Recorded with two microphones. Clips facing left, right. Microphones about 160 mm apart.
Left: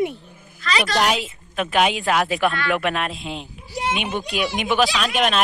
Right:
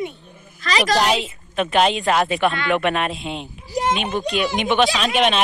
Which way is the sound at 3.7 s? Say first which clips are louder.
Right 4 dB; 40° right (ahead or behind).